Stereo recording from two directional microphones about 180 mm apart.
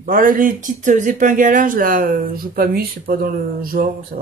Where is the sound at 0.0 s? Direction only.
50° right (ahead or behind).